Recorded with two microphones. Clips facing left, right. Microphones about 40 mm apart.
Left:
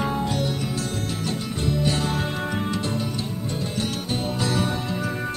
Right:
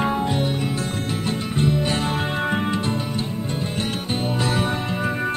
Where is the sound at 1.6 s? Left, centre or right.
Right.